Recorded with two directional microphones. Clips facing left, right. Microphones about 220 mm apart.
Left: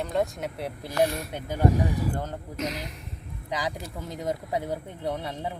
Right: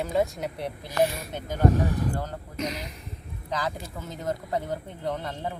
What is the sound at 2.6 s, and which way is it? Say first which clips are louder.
Speech: even; centre (ahead or behind).